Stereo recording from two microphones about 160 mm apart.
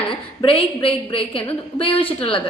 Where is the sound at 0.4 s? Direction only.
35° left (ahead or behind).